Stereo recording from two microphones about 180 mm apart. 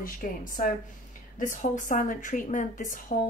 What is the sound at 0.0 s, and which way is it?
A woman's voice, 50° left (ahead or behind).